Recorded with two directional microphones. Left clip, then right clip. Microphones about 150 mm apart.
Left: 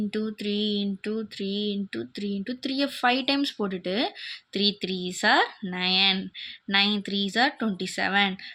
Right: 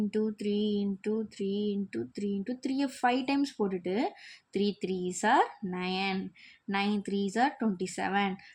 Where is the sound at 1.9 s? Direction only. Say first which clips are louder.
Left 2 dB; 25° left (ahead or behind).